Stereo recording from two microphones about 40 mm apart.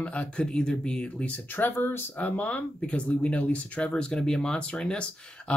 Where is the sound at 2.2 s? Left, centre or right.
Left.